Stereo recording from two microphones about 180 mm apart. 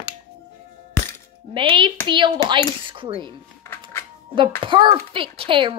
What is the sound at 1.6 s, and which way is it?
A woman's voice, 25° right (ahead or behind).